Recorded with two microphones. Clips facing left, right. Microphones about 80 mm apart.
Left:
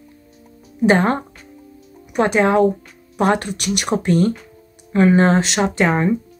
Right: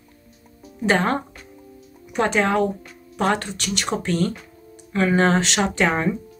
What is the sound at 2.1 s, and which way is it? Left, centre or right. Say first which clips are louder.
Speech: left 4 dB; centre.